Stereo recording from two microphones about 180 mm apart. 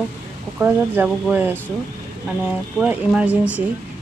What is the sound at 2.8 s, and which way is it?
Speech, 5° right (ahead or behind).